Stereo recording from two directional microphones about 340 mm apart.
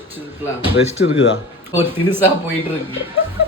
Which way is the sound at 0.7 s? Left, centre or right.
Left.